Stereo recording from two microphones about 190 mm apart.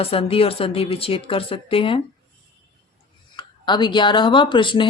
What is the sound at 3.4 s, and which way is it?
Speech, 25° left (ahead or behind).